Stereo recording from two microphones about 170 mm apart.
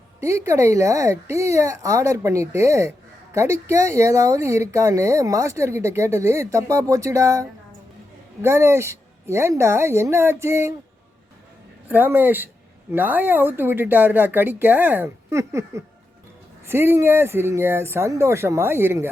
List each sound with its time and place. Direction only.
0.2 s speech: 15° right (ahead or behind)
11.9 s speech: 10° right (ahead or behind)